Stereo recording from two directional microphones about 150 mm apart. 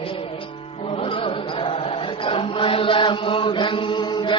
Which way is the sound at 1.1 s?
35° left (ahead or behind).